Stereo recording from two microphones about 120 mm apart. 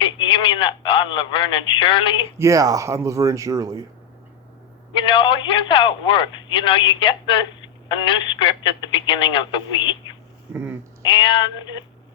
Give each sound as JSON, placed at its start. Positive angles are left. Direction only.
{"t": 0.0, "sound": "speech", "side_deg": 45}
{"t": 2.4, "sound": "speech", "side_deg": -30}
{"t": 4.9, "sound": "speech", "side_deg": 45}
{"t": 11.0, "sound": "speech", "side_deg": 45}